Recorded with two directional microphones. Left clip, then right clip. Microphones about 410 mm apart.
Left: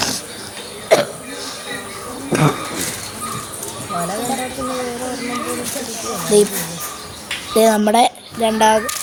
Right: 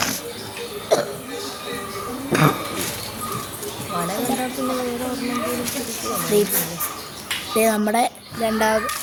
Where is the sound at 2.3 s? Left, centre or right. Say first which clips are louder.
Left 1 dB; right.